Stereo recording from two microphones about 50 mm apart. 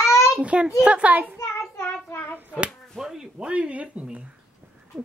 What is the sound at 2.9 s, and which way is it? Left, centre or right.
Speech, centre.